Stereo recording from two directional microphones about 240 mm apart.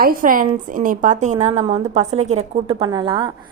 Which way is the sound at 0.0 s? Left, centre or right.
Right.